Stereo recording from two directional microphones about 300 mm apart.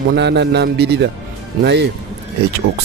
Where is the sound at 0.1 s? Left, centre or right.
Right.